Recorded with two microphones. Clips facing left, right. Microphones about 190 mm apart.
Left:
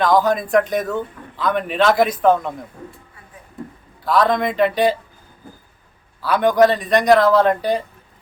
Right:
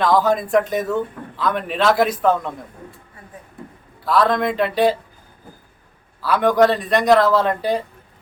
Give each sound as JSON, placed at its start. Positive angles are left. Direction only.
{"t": 0.0, "sound": "speech", "side_deg": -5}
{"t": 4.0, "sound": "speech", "side_deg": 0}
{"t": 6.2, "sound": "speech", "side_deg": 0}